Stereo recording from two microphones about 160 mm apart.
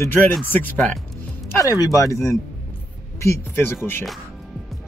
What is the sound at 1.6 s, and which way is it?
Speech, 20° left (ahead or behind).